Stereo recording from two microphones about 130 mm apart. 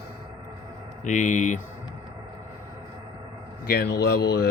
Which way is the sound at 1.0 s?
70° left (ahead or behind).